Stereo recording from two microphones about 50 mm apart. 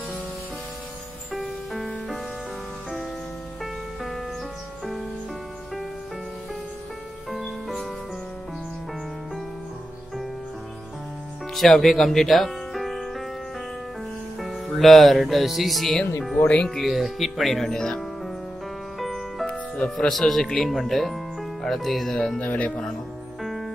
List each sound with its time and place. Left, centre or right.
1.3 s music: centre
7.2 s music: centre
11.5 s speech: centre
14.4 s speech: centre
17.6 s speech: centre
18.9 s music: centre
19.4 s music: centre
20.1 s speech: centre
22.4 s speech: left
23.4 s music: centre